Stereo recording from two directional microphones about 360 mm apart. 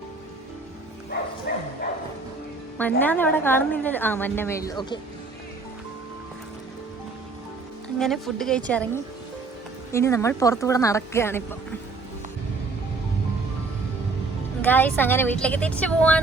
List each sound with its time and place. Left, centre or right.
1.5 s bow-wow: left
3.0 s a woman's voice: centre
7.9 s a woman's voice: centre
9.9 s a woman's voice: centre
14.6 s a woman's voice: centre